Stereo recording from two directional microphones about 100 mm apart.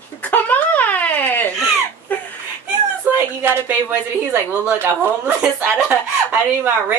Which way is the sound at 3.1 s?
20° right (ahead or behind).